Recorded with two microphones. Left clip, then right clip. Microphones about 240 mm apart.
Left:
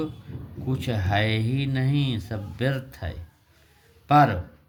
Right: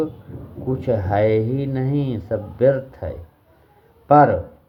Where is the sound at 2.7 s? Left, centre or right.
Left.